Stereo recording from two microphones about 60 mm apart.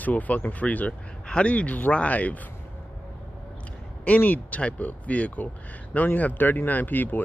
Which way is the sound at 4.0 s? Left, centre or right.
Left.